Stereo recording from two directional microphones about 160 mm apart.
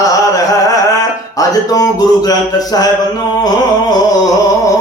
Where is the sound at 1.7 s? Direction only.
25° left (ahead or behind).